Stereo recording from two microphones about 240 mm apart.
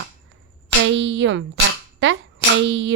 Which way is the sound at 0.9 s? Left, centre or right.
Right.